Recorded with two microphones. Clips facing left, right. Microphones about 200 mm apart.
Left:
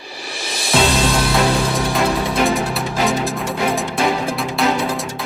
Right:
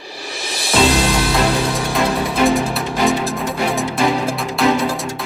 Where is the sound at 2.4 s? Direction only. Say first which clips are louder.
Right 5 dB; centre (ahead or behind).